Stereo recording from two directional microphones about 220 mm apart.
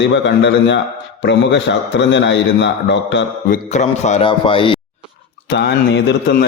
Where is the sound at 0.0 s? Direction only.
55° left (ahead or behind).